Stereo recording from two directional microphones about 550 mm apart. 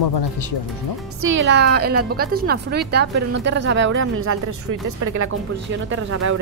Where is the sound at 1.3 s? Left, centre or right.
Centre.